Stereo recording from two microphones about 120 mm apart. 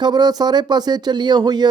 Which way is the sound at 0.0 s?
35° right (ahead or behind).